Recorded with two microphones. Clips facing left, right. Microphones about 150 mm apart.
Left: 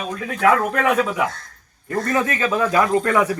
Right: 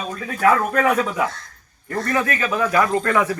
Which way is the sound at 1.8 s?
20° left (ahead or behind).